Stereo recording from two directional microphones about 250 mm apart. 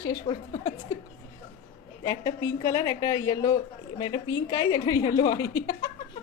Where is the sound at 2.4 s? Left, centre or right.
Centre.